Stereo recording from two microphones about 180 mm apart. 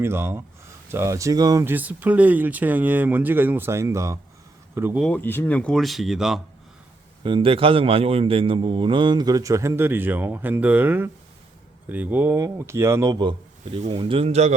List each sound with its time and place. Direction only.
0.0 s speech: 15° right (ahead or behind)
4.9 s speech: 5° left (ahead or behind)
7.3 s a man's voice: 30° right (ahead or behind)